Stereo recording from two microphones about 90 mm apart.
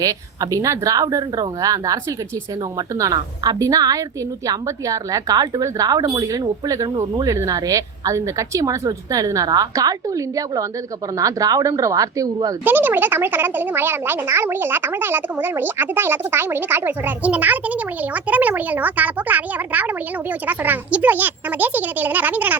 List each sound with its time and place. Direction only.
0.0 s speech: 40° right (ahead or behind)
3.0 s a woman's voice: 40° right (ahead or behind)
12.6 s speech: 20° right (ahead or behind)